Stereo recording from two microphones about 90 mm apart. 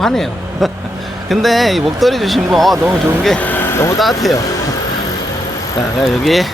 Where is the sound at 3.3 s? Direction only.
20° left (ahead or behind).